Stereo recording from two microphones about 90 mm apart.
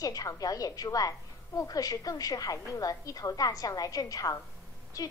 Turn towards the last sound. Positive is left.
turn(degrees=40)  # may be behind; listen again after turning